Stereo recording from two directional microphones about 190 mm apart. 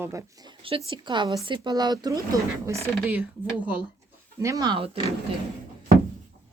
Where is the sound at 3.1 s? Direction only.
10° right (ahead or behind); by 4.9 s 25° right (ahead or behind).